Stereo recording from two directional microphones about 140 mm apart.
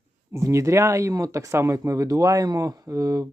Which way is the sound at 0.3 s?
20° right (ahead or behind).